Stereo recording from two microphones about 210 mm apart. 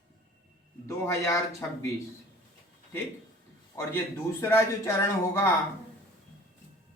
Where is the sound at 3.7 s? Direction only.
15° left (ahead or behind).